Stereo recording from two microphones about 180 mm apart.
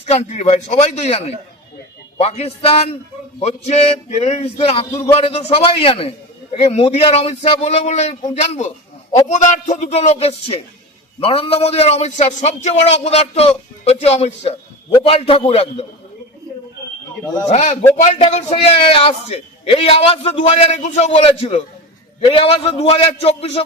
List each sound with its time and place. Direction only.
0.1 s a man's voice: 35° left (ahead or behind)
17.5 s a man's voice: 40° left (ahead or behind)